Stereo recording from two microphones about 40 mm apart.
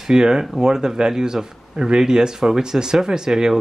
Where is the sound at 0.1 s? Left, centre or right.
Centre.